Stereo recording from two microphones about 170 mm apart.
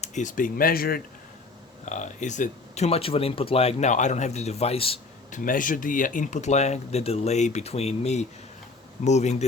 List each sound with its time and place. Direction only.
0.0 s speech: 45° left (ahead or behind)
1.8 s speech: 45° left (ahead or behind)
5.3 s speech: 50° left (ahead or behind)